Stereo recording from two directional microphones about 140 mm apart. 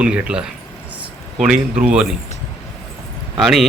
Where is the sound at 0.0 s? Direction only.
10° right (ahead or behind).